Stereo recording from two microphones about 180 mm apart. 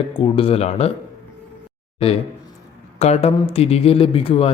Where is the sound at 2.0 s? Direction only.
30° left (ahead or behind).